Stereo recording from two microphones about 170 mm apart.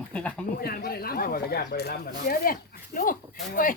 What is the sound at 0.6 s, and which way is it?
Speech, 65° left (ahead or behind).